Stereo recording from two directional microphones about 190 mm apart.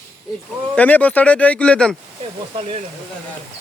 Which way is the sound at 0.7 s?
10° left (ahead or behind).